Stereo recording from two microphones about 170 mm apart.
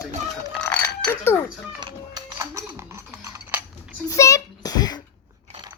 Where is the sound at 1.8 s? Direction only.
20° right (ahead or behind).